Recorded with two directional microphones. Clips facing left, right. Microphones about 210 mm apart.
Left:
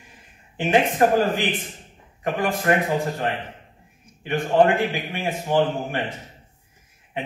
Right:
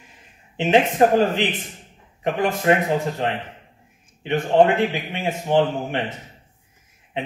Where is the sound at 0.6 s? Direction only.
20° right (ahead or behind).